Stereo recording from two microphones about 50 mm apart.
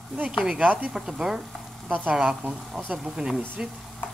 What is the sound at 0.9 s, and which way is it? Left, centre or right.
Speech, centre.